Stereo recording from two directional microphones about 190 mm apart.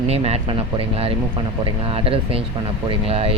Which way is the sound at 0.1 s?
30° right (ahead or behind).